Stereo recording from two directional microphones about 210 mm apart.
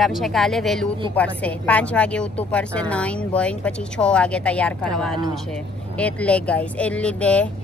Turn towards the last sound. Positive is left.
turn(degrees=5)  # may be behind; listen again after turning